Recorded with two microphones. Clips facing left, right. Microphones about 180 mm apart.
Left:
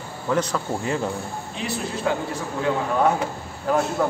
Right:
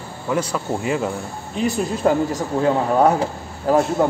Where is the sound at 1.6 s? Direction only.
45° right (ahead or behind).